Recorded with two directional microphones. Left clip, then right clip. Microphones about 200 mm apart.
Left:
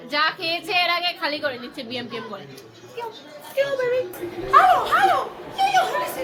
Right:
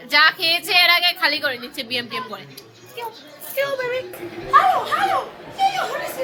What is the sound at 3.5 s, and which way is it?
Speech, 30° right (ahead or behind).